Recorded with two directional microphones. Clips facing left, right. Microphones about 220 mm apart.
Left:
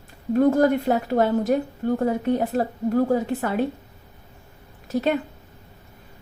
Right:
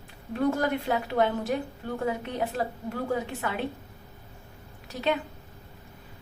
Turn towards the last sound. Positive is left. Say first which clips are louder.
# left 6 dB
turn(degrees=45)  # may be behind; listen again after turning